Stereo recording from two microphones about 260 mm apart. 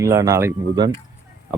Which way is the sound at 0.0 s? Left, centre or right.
Centre.